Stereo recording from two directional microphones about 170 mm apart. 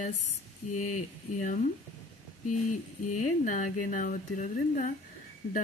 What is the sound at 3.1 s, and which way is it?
Speech, 50° left (ahead or behind).